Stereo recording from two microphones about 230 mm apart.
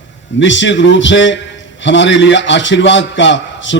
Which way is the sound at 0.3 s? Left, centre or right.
Left.